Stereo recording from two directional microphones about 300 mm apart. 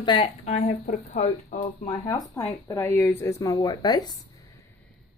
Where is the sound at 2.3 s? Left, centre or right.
Centre.